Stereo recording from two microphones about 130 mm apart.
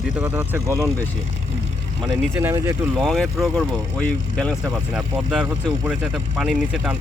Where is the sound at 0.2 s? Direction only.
15° right (ahead or behind).